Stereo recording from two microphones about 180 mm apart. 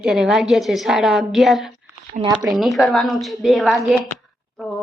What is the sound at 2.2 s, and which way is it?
Speech, 20° right (ahead or behind).